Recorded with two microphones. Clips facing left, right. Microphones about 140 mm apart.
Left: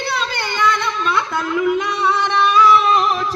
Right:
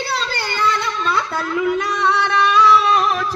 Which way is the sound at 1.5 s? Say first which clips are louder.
Left 1 dB; 10° left (ahead or behind).